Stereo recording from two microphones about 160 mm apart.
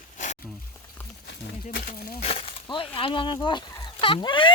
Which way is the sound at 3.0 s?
35° left (ahead or behind).